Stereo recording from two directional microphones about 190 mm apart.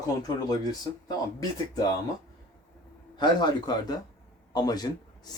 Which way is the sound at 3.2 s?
20° left (ahead or behind).